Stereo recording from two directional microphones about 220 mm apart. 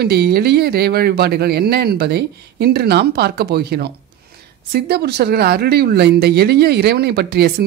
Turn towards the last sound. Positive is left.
turn(degrees=-45)  # may be behind; listen again after turning